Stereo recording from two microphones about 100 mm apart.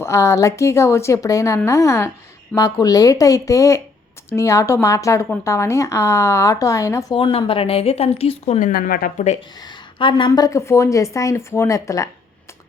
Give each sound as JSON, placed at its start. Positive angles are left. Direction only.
{"t": 0.0, "sound": "a woman's voice", "side_deg": 30}
{"t": 7.1, "sound": "speech", "side_deg": 60}
{"t": 9.6, "sound": "a woman's voice", "side_deg": 50}
{"t": 10.3, "sound": "a woman's voice", "side_deg": 35}